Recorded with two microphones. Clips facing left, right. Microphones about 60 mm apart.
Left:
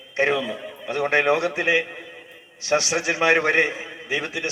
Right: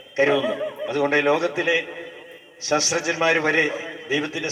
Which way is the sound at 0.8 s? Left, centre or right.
Left.